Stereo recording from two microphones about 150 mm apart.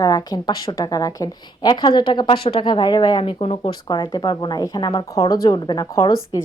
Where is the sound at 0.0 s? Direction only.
25° left (ahead or behind).